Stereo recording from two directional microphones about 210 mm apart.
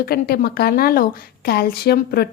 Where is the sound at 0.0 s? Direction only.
45° left (ahead or behind).